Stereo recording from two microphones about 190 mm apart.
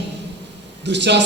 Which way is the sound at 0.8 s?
65° right (ahead or behind).